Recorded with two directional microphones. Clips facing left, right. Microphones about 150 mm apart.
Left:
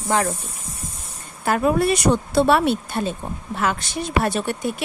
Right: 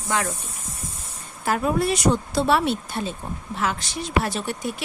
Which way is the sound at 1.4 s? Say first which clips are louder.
Left 4 dB; 60° left (ahead or behind).